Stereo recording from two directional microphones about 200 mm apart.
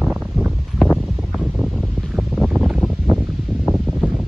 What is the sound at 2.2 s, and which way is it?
Boat, centre (ahead or behind).